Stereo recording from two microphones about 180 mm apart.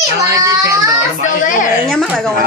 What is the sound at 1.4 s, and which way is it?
Speech, 45° left (ahead or behind).